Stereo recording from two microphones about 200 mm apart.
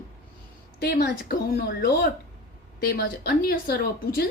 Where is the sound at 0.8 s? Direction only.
50° left (ahead or behind).